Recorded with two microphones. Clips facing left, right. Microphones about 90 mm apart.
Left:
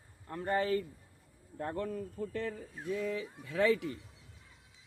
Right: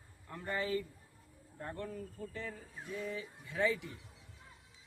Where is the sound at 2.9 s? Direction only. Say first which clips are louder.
Left 6 dB; 90° left.